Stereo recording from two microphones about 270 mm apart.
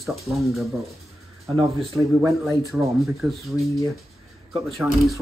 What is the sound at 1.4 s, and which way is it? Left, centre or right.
Speech, centre.